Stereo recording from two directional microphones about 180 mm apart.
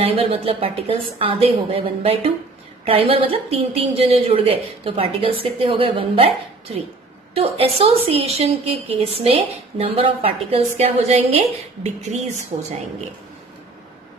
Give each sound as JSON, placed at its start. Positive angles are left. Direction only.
{"t": 0.0, "sound": "a woman's voice", "side_deg": -35}
{"t": 7.3, "sound": "a woman's voice", "side_deg": -35}